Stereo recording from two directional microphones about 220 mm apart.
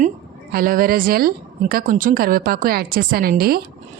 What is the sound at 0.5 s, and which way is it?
Speech, 40° right (ahead or behind).